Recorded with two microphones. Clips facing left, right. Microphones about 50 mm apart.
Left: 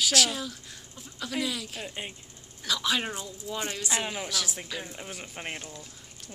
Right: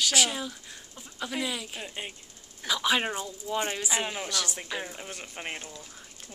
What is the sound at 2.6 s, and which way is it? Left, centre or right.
A woman's voice, centre.